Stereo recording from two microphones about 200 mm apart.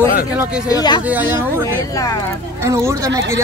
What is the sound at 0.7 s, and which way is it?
Speech, 20° left (ahead or behind).